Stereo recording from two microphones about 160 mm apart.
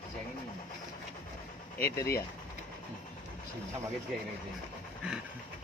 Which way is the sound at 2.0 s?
20° left (ahead or behind).